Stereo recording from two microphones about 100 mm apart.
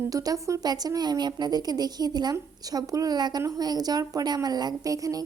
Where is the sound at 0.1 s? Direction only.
35° right (ahead or behind).